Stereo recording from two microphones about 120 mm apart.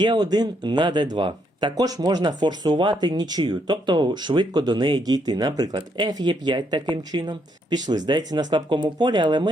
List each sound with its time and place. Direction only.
0.0 s speech: 35° right (ahead or behind)